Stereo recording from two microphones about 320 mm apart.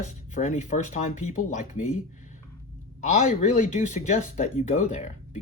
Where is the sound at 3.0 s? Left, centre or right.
Left.